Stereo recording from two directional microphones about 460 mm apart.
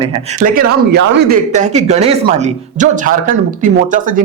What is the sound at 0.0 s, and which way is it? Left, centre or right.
Speech, centre.